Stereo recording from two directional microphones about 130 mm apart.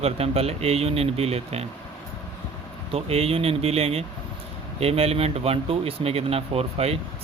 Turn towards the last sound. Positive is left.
turn(degrees=-50)  # may be behind; listen again after turning